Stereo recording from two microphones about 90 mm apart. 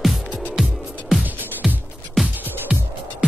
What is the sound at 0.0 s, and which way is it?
Music, centre (ahead or behind).